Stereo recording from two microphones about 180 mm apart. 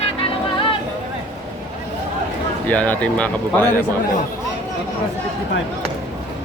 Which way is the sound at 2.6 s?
10° left (ahead or behind).